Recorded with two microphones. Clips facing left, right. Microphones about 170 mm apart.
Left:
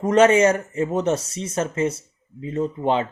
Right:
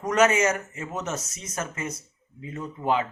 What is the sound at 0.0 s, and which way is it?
Speech, 30° left (ahead or behind).